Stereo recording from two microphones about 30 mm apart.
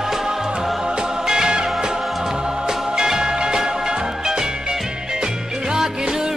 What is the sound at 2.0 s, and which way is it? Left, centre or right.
Music, centre.